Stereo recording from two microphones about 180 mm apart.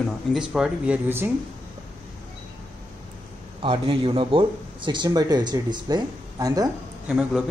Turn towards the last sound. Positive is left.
turn(degrees=-5)  # may be behind; listen again after turning